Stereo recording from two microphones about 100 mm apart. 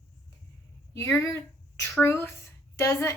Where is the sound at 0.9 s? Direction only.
30° left (ahead or behind).